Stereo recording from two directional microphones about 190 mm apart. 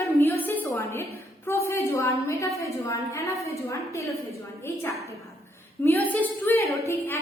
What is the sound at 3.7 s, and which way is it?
Speech, 15° left (ahead or behind).